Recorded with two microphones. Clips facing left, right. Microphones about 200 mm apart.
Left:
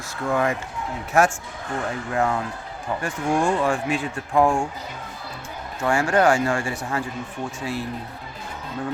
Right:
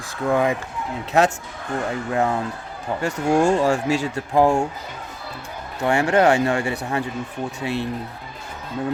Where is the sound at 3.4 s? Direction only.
45° right (ahead or behind).